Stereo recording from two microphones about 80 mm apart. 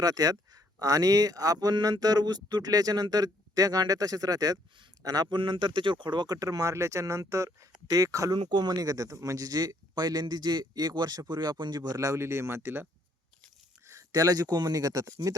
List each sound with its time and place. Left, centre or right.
0.0 s speech: right
5.3 s speech: right
8.4 s speech: right
13.8 s speech: right